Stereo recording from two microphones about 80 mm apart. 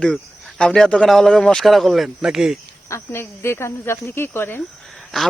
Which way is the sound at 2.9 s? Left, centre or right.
Left.